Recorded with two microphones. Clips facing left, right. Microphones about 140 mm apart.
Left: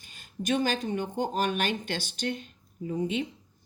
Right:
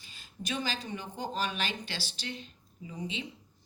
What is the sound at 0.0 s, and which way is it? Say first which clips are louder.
A woman's voice: left 9 dB; 50° left (ahead or behind).